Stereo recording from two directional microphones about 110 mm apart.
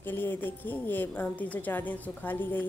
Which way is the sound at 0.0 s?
20° left (ahead or behind).